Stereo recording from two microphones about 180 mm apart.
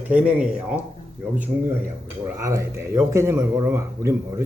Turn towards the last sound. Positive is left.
turn(degrees=-15)  # may be behind; listen again after turning